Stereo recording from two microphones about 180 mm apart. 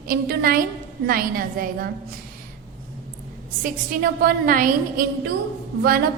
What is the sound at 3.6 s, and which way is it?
A woman's voice, 50° right (ahead or behind).